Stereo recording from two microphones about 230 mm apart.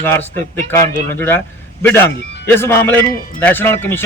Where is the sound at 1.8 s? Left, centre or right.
Centre.